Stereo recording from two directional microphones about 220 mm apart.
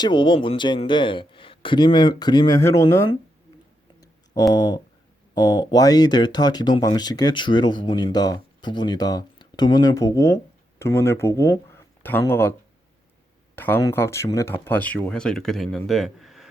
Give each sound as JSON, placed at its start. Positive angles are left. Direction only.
{"t": 0.0, "sound": "speech", "side_deg": 20}
{"t": 4.4, "sound": "speech", "side_deg": 15}
{"t": 13.6, "sound": "speech", "side_deg": 10}